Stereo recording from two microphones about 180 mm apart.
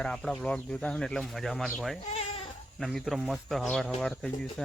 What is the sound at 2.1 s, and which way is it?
Speech, 35° left (ahead or behind).